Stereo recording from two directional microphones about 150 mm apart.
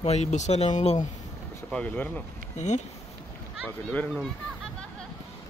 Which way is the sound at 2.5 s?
50° left (ahead or behind).